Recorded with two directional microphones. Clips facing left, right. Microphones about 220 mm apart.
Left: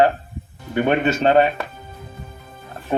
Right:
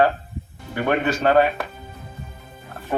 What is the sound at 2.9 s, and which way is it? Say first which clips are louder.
Speech: left 2 dB; 25° left (ahead or behind).